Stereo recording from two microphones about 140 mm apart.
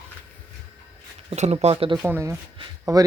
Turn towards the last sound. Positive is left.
turn(degrees=-25)  # may be behind; listen again after turning